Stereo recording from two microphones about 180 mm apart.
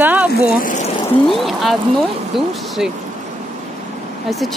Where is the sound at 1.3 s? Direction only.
Centre (ahead or behind).